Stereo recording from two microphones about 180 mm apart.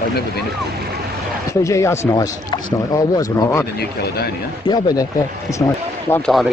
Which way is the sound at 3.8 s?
60° left (ahead or behind).